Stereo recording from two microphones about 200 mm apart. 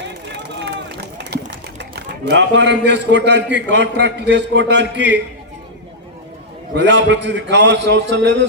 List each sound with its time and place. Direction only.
0.0 s run: 60° right (ahead or behind)
1.2 s speech: 60° right (ahead or behind)
6.7 s a man's voice: 60° right (ahead or behind)